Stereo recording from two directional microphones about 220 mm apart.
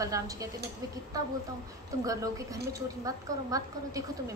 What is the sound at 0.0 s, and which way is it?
Speech, 15° right (ahead or behind).